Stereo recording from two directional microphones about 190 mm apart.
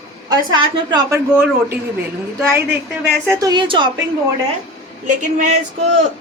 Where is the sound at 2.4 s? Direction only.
10° right (ahead or behind).